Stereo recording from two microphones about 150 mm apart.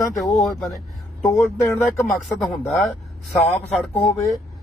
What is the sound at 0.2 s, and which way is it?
Speech, centre (ahead or behind).